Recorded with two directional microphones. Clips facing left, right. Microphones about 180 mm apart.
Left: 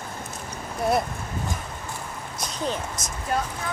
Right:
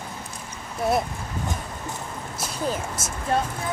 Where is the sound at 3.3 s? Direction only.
25° right (ahead or behind).